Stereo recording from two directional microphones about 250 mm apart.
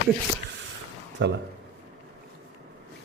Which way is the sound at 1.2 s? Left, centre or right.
Right.